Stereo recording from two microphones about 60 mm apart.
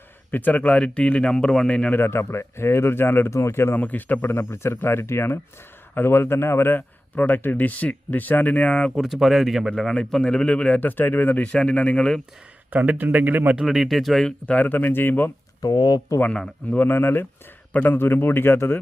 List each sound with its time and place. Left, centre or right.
0.3 s speech: left
1.9 s speech: left
3.8 s speech: left
9.0 s speech: centre
9.6 s a man's voice: centre
10.8 s speech: left
11.5 s a man's voice: centre
12.7 s a man's voice: right
13.6 s speech: centre
14.4 s speech: left
15.6 s speech: left
16.6 s speech: left